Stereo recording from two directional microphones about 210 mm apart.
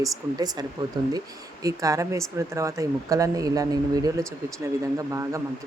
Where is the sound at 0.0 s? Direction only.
20° right (ahead or behind).